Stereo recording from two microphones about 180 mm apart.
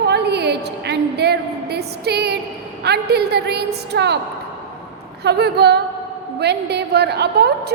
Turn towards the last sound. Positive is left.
turn(degrees=-65)  # may be behind; listen again after turning